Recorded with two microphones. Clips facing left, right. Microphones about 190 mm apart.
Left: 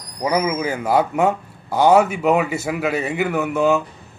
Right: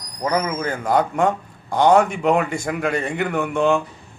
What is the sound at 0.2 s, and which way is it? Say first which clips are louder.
A man's voice: left 2 dB; 10° left (ahead or behind).